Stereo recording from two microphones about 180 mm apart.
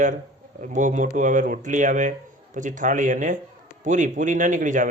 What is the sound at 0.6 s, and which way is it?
Speech, 45° right (ahead or behind).